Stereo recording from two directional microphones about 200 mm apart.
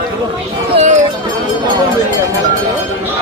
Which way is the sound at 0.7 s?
35° right (ahead or behind).